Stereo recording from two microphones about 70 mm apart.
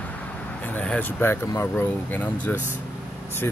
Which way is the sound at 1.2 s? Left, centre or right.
Left.